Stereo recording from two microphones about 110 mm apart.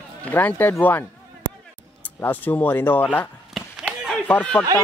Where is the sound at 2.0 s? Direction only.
15° left (ahead or behind).